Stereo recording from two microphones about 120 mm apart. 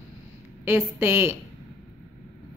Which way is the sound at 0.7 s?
20° right (ahead or behind).